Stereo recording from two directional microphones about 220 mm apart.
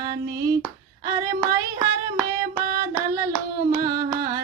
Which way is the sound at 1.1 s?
15° right (ahead or behind).